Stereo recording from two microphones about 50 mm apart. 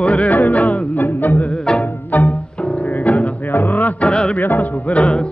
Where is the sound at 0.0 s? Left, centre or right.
Left.